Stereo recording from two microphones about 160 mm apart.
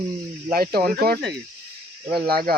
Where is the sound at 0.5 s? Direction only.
70° right (ahead or behind).